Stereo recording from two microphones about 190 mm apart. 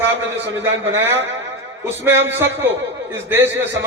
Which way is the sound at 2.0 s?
15° right (ahead or behind).